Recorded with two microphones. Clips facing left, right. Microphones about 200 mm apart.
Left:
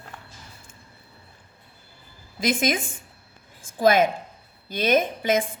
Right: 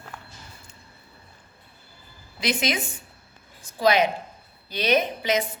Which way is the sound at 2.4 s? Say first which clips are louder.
Left 3 dB; 50° left (ahead or behind).